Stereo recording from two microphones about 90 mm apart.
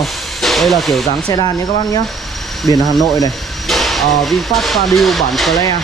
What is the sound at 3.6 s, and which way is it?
Speech, centre (ahead or behind).